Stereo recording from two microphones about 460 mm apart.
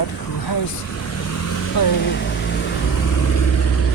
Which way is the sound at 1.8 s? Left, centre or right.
Left.